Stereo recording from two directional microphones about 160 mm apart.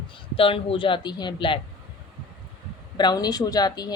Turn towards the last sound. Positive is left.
turn(degrees=25)  # may be behind; listen again after turning